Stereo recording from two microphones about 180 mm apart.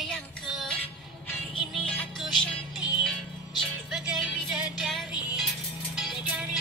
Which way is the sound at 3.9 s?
Centre (ahead or behind).